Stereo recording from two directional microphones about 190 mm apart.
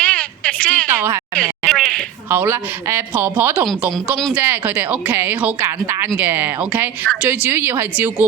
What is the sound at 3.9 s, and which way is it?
A woman's voice, centre (ahead or behind).